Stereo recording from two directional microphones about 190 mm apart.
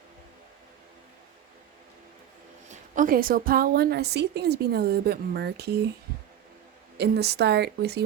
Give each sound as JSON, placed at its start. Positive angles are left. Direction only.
{"t": 2.6, "sound": "a woman's voice", "side_deg": -45}
{"t": 6.9, "sound": "a woman's voice", "side_deg": -60}